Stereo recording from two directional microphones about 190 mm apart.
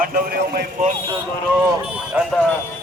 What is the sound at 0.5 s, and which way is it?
Speech, 40° right (ahead or behind).